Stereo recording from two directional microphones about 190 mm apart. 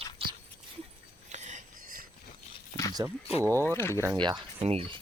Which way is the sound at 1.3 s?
40° right (ahead or behind).